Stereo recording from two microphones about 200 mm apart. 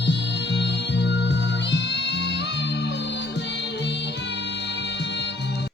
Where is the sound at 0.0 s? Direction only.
60° left (ahead or behind).